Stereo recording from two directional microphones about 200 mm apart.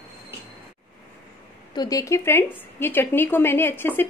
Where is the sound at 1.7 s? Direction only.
20° left (ahead or behind).